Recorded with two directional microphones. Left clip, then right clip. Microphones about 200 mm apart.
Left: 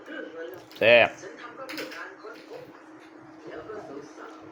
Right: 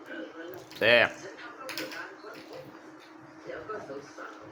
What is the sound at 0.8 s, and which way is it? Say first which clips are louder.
Speech: left 4 dB; 15° left (ahead or behind).